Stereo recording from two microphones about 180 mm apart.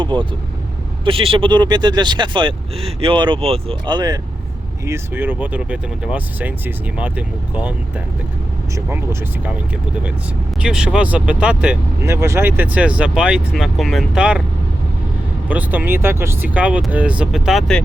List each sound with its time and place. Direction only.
0.0 s speech: 25° right (ahead or behind)
4.9 s speech: 10° right (ahead or behind)
8.7 s speech: 10° right (ahead or behind)
10.6 s speech: 5° right (ahead or behind)
15.4 s speech: 10° right (ahead or behind)